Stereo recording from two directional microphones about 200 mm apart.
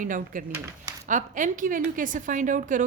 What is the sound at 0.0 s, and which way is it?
A woman's voice, 40° right (ahead or behind).